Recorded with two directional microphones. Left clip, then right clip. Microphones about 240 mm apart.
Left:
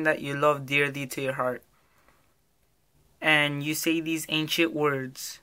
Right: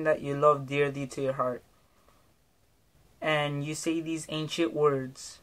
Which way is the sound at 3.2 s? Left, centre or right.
Centre.